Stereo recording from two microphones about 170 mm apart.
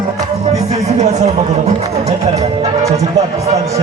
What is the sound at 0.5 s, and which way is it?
Music, 40° right (ahead or behind).